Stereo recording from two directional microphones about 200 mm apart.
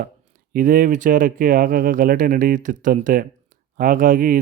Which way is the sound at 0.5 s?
45° right (ahead or behind).